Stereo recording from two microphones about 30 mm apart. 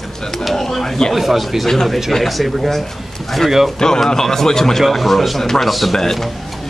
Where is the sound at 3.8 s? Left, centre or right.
Left.